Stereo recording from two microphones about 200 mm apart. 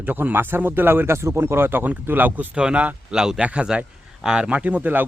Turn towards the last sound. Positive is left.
turn(degrees=-10)  # may be behind; listen again after turning